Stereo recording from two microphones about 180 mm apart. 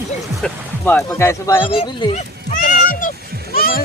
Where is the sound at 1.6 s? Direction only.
30° left (ahead or behind).